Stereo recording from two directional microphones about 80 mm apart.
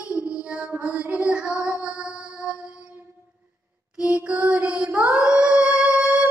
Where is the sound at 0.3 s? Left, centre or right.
Centre.